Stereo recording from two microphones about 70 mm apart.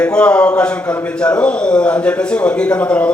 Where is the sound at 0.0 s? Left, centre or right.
Centre.